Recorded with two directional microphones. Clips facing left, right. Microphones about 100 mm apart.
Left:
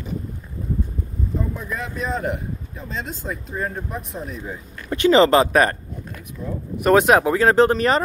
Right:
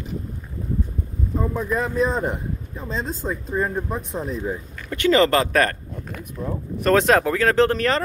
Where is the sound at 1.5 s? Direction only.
40° right (ahead or behind).